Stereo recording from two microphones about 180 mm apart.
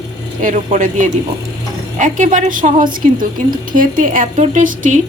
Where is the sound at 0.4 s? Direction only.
45° right (ahead or behind).